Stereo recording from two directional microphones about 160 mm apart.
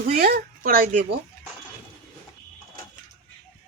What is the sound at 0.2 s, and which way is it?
Speech, 70° right (ahead or behind).